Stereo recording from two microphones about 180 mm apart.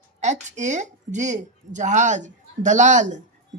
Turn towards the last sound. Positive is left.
turn(degrees=-40)  # may be behind; listen again after turning